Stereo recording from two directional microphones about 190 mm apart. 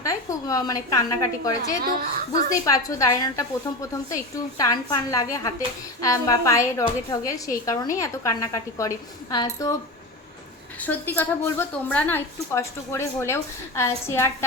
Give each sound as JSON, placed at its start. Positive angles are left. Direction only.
{"t": 0.0, "sound": "a woman's voice", "side_deg": 20}
{"t": 10.8, "sound": "a woman's voice", "side_deg": 10}